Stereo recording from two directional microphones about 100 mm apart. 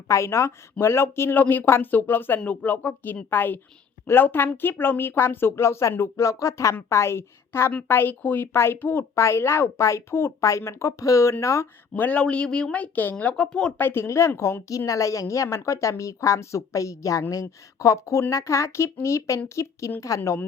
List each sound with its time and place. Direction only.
0.1 s speech: 30° left (ahead or behind)
11.9 s speech: 15° left (ahead or behind)
13.8 s a woman's voice: 25° left (ahead or behind)